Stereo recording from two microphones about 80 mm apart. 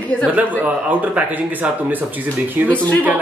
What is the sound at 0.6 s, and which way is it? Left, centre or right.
Speech, right.